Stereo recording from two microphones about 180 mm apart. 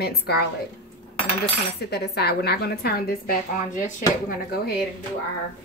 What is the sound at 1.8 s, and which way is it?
A woman's voice, 60° left (ahead or behind).